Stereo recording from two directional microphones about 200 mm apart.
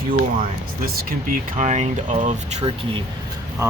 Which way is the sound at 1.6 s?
35° right (ahead or behind).